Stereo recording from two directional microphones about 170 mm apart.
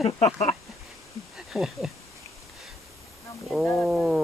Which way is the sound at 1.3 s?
Centre (ahead or behind).